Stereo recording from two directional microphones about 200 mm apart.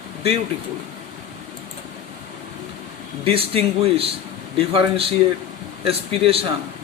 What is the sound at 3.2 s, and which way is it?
Speech, 30° right (ahead or behind).